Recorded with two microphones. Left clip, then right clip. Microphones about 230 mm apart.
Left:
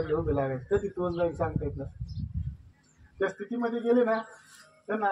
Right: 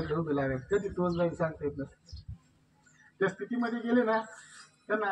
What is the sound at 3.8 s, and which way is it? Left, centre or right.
Speech, left.